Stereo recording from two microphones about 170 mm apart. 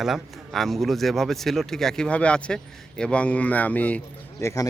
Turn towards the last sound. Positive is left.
turn(degrees=15)  # may be behind; listen again after turning